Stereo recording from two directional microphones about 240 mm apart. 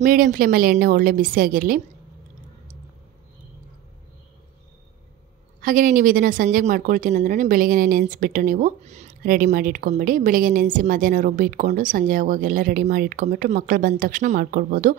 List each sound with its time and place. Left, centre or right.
0.0 s speech: right
5.6 s speech: right